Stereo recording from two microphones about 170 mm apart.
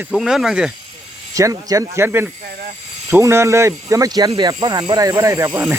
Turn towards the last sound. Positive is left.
turn(degrees=-15)  # may be behind; listen again after turning